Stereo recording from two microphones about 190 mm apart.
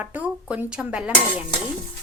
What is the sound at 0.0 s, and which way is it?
Speech, 10° right (ahead or behind).